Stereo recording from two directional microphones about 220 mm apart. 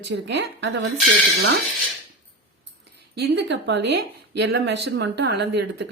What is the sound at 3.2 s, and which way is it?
Speech, 50° right (ahead or behind).